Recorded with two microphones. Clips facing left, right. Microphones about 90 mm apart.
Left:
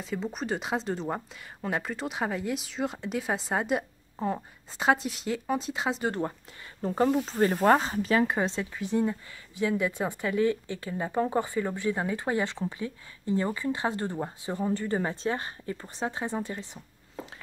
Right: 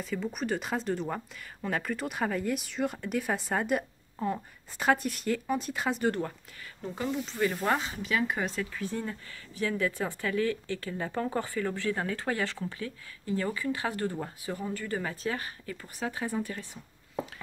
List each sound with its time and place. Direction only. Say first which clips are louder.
0.0 s speech: even; 25° left (ahead or behind)
6.8 s speech: left 8 dB; 40° left (ahead or behind)